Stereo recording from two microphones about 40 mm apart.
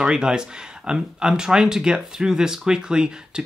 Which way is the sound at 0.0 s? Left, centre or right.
Centre.